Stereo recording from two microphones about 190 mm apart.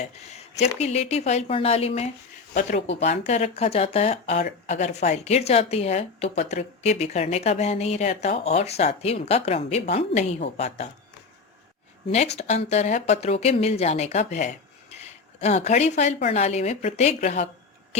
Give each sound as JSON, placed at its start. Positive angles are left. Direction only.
{"t": 0.0, "sound": "speech", "side_deg": 35}
{"t": 12.1, "sound": "speech", "side_deg": 35}